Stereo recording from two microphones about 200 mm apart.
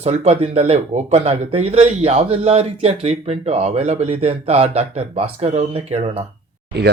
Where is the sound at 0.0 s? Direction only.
30° right (ahead or behind).